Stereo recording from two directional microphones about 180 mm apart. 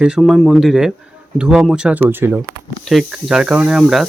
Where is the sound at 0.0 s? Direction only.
Centre (ahead or behind).